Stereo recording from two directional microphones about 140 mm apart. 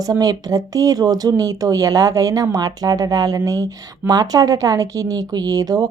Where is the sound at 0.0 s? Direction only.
25° right (ahead or behind).